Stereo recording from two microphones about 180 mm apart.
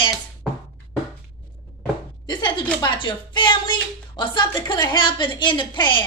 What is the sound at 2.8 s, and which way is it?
A woman's voice, 25° left (ahead or behind).